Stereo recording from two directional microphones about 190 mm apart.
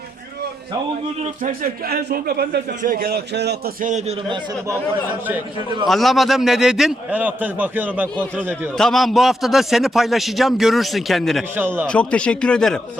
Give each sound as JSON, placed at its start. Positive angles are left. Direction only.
{"t": 1.2, "sound": "speech", "side_deg": -40}
{"t": 1.9, "sound": "a man's voice", "side_deg": -55}
{"t": 5.8, "sound": "a man's voice", "side_deg": 0}
{"t": 11.5, "sound": "speech", "side_deg": -10}
{"t": 11.9, "sound": "a man's voice", "side_deg": 5}